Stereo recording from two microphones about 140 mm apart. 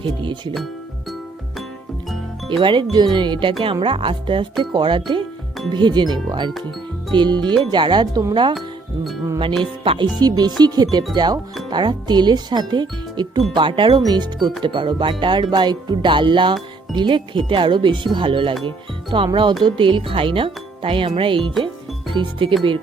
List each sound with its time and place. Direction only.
0.0 s speech: 35° right (ahead or behind)
2.5 s speech: 35° right (ahead or behind)
9.8 s speech: 40° right (ahead or behind)
10.2 s speech: 30° right (ahead or behind)